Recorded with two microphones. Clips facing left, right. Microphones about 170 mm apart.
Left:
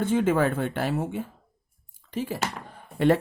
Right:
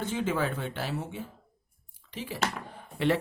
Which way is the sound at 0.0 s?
50° left (ahead or behind).